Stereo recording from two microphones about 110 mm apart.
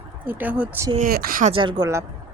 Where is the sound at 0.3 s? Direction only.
15° right (ahead or behind).